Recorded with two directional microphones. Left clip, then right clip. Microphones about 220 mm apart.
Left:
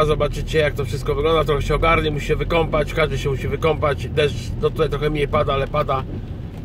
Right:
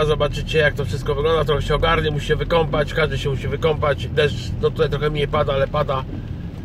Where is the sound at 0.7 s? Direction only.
20° left (ahead or behind).